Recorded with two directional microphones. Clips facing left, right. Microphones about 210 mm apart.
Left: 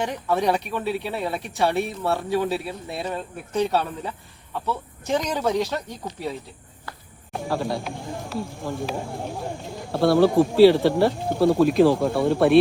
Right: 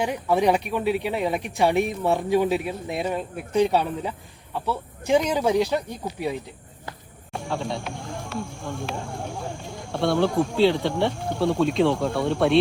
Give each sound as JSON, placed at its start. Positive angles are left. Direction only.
{"t": 0.0, "sound": "speech", "side_deg": -10}
{"t": 7.3, "sound": "speech", "side_deg": 5}
{"t": 9.1, "sound": "speech", "side_deg": 20}
{"t": 9.8, "sound": "speech", "side_deg": 5}